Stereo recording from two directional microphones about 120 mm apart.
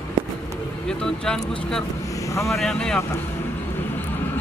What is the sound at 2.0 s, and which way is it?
Vehicle, 25° left (ahead or behind).